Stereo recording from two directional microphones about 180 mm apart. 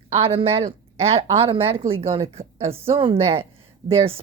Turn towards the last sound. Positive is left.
turn(degrees=-30)  # may be behind; listen again after turning